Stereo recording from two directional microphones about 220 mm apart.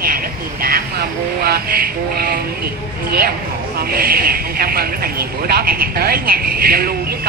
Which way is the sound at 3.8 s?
45° right (ahead or behind).